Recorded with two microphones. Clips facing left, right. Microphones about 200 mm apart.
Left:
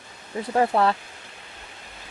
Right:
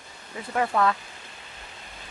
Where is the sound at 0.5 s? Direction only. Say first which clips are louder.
Left 3 dB; 30° left (ahead or behind).